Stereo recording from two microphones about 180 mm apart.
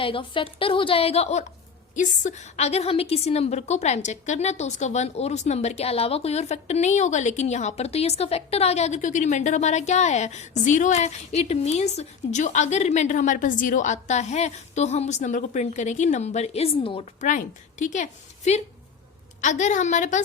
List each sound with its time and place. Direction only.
0.0 s a woman's voice: 30° left (ahead or behind)
17.2 s a woman's voice: 45° left (ahead or behind)